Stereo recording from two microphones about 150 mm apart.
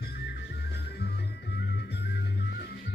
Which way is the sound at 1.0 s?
90° left.